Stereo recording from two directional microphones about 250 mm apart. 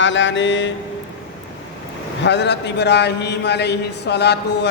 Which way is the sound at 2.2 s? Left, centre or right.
Left.